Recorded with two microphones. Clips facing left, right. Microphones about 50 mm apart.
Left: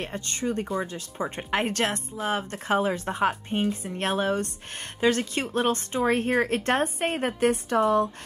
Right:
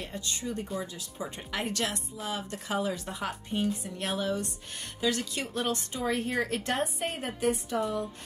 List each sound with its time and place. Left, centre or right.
0.0 s a woman's voice: left